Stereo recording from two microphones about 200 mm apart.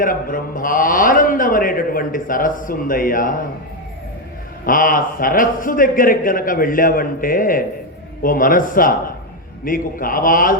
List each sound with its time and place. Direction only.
0.0 s a man's voice: 45° left (ahead or behind)
4.6 s a man's voice: 45° left (ahead or behind)